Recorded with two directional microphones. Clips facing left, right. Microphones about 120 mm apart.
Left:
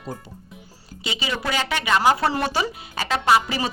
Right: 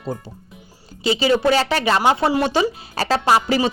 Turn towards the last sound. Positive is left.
turn(degrees=-30)  # may be behind; listen again after turning